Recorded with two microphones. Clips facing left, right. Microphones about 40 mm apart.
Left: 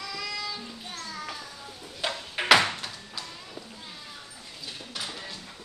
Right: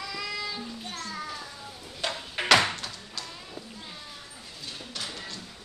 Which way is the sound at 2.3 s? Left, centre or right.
Centre.